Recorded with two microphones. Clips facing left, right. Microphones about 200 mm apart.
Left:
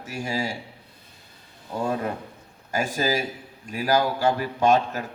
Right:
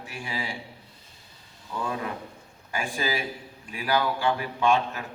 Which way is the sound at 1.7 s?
40° left (ahead or behind).